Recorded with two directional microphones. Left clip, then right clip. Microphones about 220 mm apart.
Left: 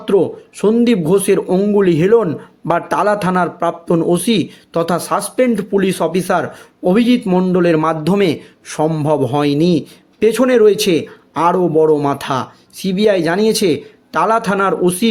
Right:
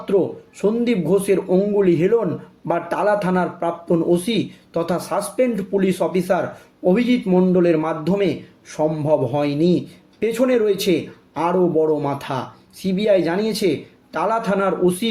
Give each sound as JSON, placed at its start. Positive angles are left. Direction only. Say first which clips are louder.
{"t": 0.0, "sound": "a man's voice", "louder": "left 5 dB", "side_deg": 40}